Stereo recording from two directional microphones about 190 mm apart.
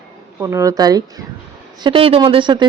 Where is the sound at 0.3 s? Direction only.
15° right (ahead or behind).